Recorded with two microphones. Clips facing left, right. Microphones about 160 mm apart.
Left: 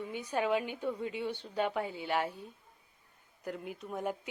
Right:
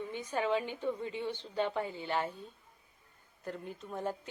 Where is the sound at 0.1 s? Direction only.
10° left (ahead or behind).